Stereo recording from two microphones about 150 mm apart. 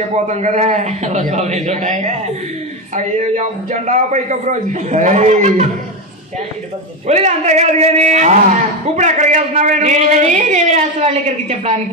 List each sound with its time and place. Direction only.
0.3 s a man's voice: 50° right (ahead or behind)
7.1 s a man's voice: 50° right (ahead or behind)